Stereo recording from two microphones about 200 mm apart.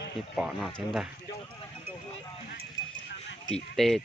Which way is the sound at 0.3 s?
Centre (ahead or behind).